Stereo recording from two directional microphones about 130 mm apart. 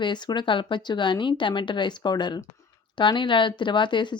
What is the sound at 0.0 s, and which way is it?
Speech, 35° left (ahead or behind).